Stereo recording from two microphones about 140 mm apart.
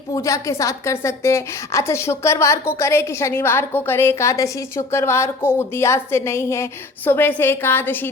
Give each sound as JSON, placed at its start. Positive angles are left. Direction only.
{"t": 0.1, "sound": "a woman's voice", "side_deg": 20}